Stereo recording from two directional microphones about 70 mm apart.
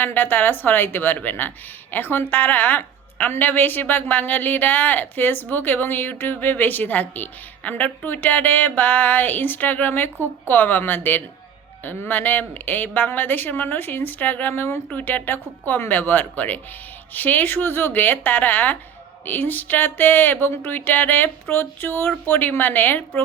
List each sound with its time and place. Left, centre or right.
0.0 s a woman's voice: left
14.8 s a woman's voice: left